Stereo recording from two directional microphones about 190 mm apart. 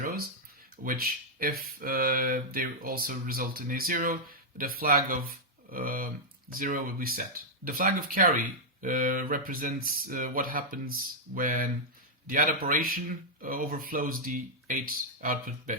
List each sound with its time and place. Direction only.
0.9 s speech: 50° right (ahead or behind)